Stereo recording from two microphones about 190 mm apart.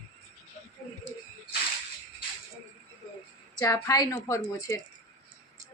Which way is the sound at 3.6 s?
15° left (ahead or behind).